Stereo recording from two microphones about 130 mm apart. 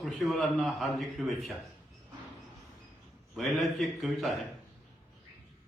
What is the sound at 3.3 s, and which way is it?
A man's voice, centre (ahead or behind).